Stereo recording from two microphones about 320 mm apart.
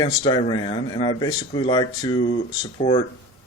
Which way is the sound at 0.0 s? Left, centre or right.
Centre.